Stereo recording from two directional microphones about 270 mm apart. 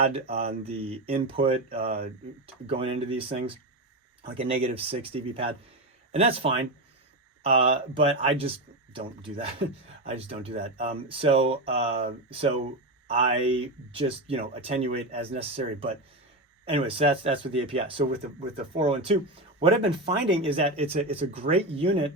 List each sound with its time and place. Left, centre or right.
0.1 s speech: right
1.8 s speech: right
2.6 s speech: right
4.6 s speech: right
13.1 s speech: right